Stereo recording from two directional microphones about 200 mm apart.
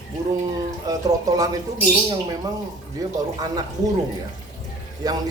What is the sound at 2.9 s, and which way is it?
Speech, 20° right (ahead or behind).